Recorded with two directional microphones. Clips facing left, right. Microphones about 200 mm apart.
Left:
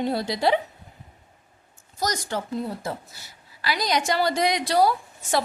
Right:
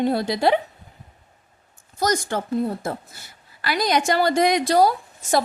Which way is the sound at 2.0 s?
55° right (ahead or behind).